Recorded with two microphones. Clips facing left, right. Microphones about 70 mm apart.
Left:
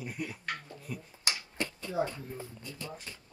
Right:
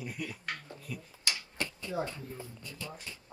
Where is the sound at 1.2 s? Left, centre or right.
Left.